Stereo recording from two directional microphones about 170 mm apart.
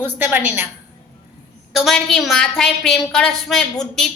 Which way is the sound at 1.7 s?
Centre (ahead or behind).